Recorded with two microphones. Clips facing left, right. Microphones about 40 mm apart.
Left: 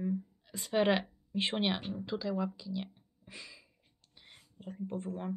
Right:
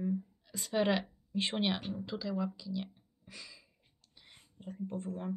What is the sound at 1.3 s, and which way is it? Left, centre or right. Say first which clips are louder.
Speech: left 1 dB; centre.